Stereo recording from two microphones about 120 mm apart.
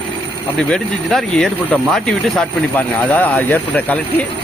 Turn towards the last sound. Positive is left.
turn(degrees=15)  # may be behind; listen again after turning